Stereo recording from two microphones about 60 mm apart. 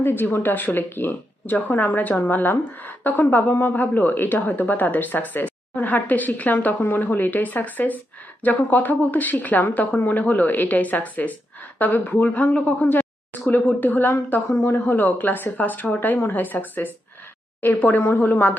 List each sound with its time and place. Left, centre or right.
0.0 s a woman's voice: left